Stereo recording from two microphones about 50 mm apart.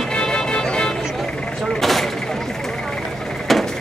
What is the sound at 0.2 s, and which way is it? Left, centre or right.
Music, centre.